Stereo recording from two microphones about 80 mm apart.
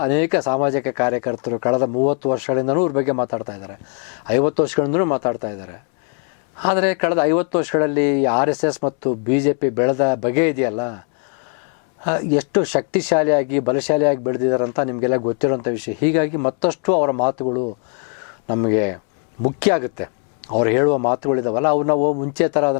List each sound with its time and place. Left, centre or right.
0.0 s speech: centre
12.0 s speech: centre